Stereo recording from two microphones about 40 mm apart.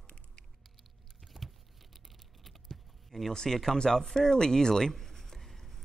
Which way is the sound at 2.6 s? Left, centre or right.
Centre.